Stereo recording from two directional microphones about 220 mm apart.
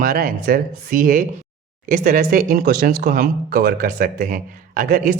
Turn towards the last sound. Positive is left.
turn(degrees=-35)  # may be behind; listen again after turning